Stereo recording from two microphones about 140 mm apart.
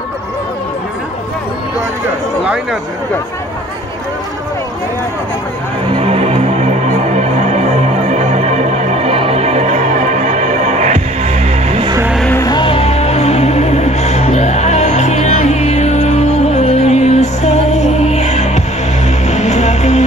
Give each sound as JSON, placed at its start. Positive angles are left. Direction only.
{"t": 2.4, "sound": "speech", "side_deg": -5}
{"t": 5.9, "sound": "music", "side_deg": -45}
{"t": 12.4, "sound": "music", "side_deg": 35}